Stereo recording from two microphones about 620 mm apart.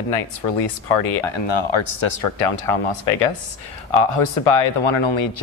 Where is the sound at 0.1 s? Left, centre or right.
Left.